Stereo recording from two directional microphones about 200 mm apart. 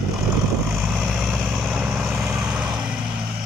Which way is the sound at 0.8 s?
Centre (ahead or behind).